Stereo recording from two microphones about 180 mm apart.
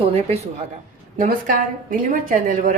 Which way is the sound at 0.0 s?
35° right (ahead or behind).